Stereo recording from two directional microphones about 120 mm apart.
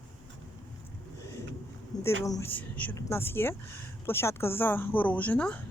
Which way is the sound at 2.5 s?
15° left (ahead or behind).